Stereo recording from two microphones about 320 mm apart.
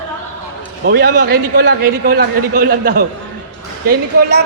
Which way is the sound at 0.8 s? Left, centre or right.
Right.